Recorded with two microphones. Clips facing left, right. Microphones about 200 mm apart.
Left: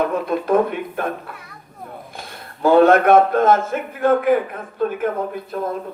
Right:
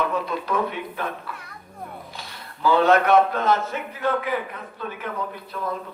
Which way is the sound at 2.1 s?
50° left (ahead or behind).